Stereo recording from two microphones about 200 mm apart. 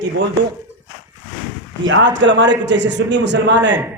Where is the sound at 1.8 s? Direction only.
70° right (ahead or behind).